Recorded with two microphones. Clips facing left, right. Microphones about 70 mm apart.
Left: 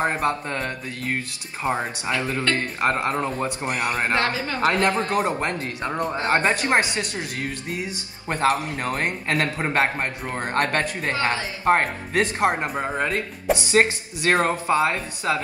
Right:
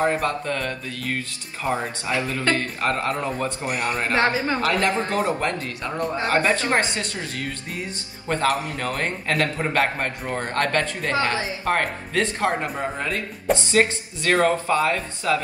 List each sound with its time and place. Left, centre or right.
0.0 s speech: left
4.2 s a woman's voice: right
4.6 s speech: left